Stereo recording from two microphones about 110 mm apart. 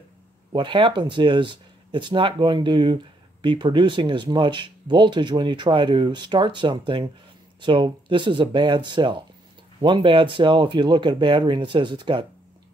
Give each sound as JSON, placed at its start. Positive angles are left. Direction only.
{"t": 0.5, "sound": "speech", "side_deg": -45}